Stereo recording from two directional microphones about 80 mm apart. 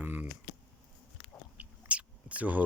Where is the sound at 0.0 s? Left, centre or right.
Right.